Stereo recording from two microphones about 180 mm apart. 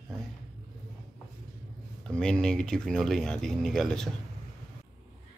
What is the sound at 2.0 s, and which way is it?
Speech, 5° left (ahead or behind).